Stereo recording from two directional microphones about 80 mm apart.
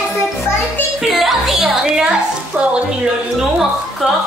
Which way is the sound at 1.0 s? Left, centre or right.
Centre.